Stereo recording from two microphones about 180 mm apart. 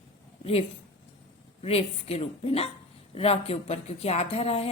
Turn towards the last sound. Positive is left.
turn(degrees=35)  # may be behind; listen again after turning